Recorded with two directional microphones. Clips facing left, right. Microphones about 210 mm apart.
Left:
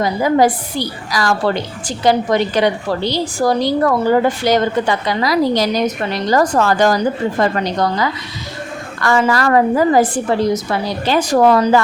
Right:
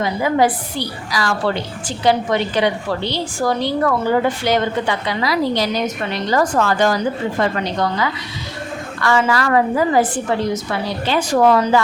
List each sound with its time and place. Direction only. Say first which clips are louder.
0.0 s a woman's voice: left 3 dB; 40° left (ahead or behind)